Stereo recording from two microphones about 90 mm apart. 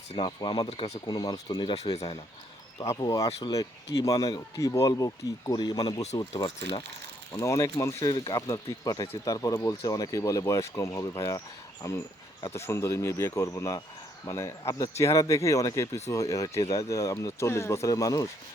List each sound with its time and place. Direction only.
0.2 s speech: 65° left (ahead or behind)
1.0 s speech: 50° left (ahead or behind); by 2.1 s 90° left
2.7 s speech: 40° left (ahead or behind)
7.3 s speech: 35° left (ahead or behind)
8.1 s speech: 70° left (ahead or behind)
8.4 s speech: 45° left (ahead or behind)